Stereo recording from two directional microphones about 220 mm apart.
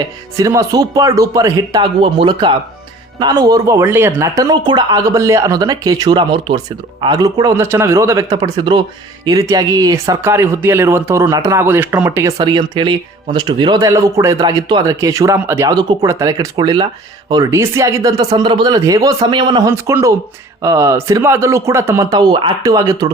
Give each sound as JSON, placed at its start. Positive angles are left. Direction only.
{"t": 0.3, "sound": "speech", "side_deg": -15}